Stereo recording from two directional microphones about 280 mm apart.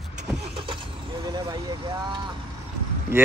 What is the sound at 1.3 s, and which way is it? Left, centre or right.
Speech, centre.